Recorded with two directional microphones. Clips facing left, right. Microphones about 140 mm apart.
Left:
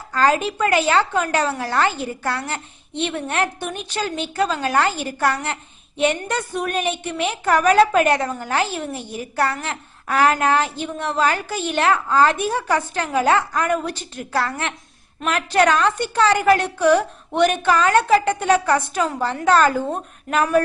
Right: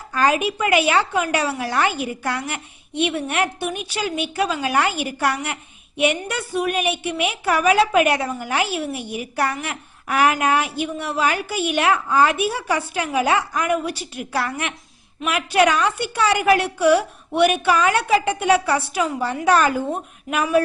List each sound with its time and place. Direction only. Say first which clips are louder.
0.1 s a woman's voice: left 1 dB; 15° right (ahead or behind)